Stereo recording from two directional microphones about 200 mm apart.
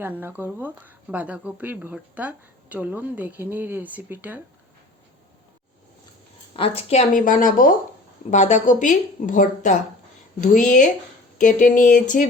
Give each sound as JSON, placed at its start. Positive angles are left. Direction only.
{"t": 0.0, "sound": "speech", "side_deg": -10}
{"t": 6.6, "sound": "a woman's voice", "side_deg": 35}